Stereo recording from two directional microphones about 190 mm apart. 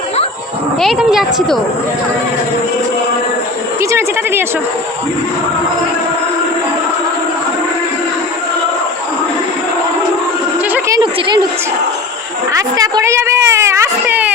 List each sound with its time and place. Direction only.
0.8 s a woman's voice: centre (ahead or behind)
3.8 s speech: 15° right (ahead or behind)
10.7 s a sound: 10° right (ahead or behind)
12.5 s speech: 20° right (ahead or behind)